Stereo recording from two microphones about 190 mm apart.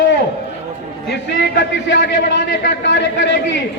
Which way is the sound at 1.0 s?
65° left (ahead or behind).